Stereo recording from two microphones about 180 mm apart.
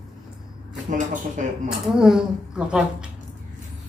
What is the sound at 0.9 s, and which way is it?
Speech, 45° right (ahead or behind).